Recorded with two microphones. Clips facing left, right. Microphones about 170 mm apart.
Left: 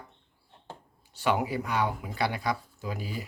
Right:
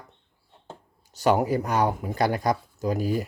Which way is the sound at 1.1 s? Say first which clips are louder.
Right 6 dB; 40° right (ahead or behind).